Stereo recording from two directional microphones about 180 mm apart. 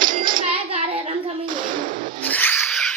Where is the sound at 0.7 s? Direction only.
35° right (ahead or behind).